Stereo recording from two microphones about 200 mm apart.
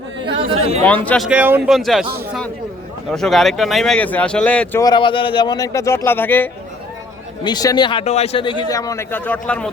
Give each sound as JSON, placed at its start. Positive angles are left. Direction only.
{"t": 0.3, "sound": "chatter", "side_deg": -25}
{"t": 0.9, "sound": "speech", "side_deg": 5}
{"t": 1.3, "sound": "speech", "side_deg": -10}
{"t": 3.1, "sound": "speech", "side_deg": 0}